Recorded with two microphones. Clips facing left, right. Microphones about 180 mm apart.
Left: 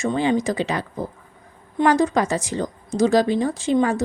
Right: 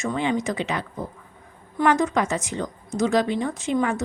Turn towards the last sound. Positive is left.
turn(degrees=35)  # may be behind; listen again after turning